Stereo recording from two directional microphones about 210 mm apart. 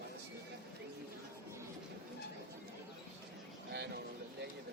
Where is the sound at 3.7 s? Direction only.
55° right (ahead or behind).